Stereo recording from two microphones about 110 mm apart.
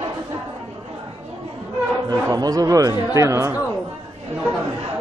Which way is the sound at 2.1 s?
35° right (ahead or behind).